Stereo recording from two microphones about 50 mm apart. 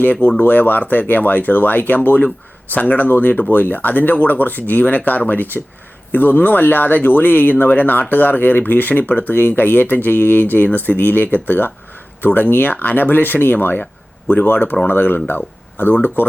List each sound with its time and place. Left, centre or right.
0.0 s speech: left